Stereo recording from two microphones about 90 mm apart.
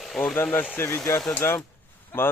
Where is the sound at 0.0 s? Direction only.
Centre (ahead or behind).